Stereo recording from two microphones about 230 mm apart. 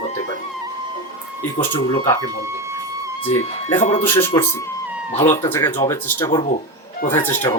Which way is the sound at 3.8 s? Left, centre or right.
Left.